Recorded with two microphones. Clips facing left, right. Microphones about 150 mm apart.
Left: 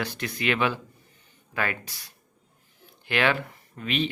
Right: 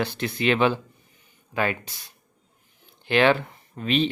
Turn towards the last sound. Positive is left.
turn(degrees=-30)  # may be behind; listen again after turning